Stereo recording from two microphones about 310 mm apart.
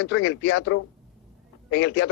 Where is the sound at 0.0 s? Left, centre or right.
Left.